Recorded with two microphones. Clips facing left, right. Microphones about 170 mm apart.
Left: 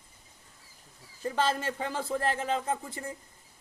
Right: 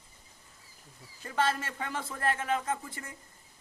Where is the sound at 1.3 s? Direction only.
30° left (ahead or behind).